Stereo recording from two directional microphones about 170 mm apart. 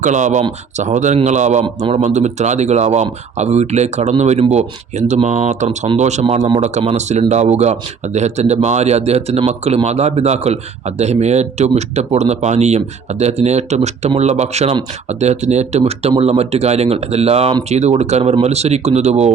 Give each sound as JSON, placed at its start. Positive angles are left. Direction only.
{"t": 0.0, "sound": "a man's voice", "side_deg": -45}
{"t": 1.6, "sound": "a man's voice", "side_deg": -30}
{"t": 2.0, "sound": "a man's voice", "side_deg": -45}